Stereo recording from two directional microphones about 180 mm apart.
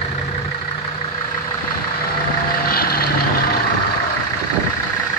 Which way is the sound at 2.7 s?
55° left (ahead or behind).